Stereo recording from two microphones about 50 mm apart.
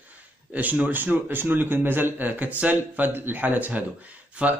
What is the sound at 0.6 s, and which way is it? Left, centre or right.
A man's voice, right.